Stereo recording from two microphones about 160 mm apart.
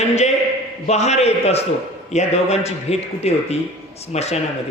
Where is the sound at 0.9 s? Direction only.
45° left (ahead or behind).